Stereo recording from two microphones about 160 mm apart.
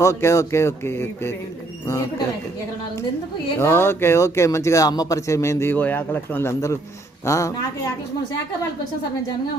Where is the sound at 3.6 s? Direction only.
15° left (ahead or behind).